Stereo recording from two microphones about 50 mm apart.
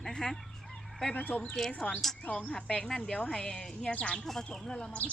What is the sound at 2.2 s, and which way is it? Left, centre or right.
Speech, left.